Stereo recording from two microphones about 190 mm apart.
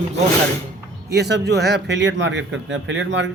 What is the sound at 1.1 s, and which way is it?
A man's voice, 60° right (ahead or behind).